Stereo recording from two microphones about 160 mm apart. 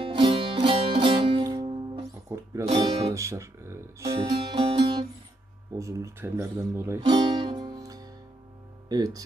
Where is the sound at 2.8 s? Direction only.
20° right (ahead or behind).